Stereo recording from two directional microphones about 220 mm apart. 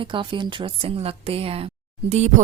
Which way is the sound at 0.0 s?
20° right (ahead or behind).